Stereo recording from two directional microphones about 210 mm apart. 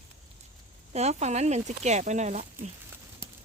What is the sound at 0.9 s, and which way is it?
Speech, 30° right (ahead or behind).